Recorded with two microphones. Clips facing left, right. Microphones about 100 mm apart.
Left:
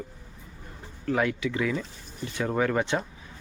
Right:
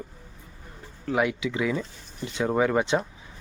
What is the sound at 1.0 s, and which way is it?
Speech, 15° right (ahead or behind).